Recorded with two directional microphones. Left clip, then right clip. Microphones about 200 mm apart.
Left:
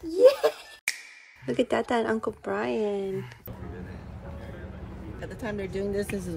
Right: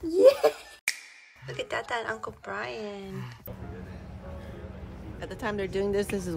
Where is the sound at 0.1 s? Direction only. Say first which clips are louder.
Even; 5° left (ahead or behind).